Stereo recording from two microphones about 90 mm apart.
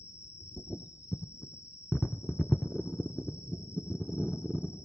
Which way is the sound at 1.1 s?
5° right (ahead or behind).